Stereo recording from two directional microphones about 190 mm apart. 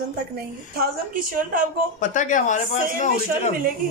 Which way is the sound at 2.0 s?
40° left (ahead or behind).